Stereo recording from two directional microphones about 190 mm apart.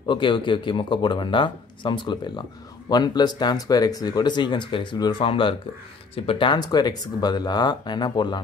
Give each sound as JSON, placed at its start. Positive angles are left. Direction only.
{"t": 0.0, "sound": "speech", "side_deg": 25}